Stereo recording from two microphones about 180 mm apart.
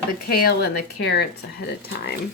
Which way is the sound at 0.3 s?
55° left (ahead or behind).